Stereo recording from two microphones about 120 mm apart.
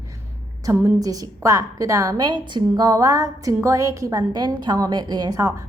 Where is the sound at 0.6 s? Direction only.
30° right (ahead or behind).